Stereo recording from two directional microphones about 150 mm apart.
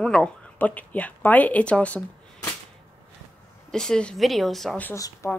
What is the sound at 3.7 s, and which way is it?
A woman's voice, 5° left (ahead or behind).